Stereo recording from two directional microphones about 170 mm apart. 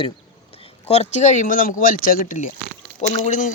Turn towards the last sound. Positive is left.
turn(degrees=50)  # may be behind; listen again after turning